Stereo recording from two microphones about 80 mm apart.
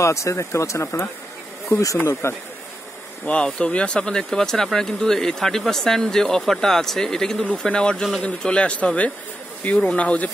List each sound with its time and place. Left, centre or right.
0.0 s speech: left
3.3 s speech: centre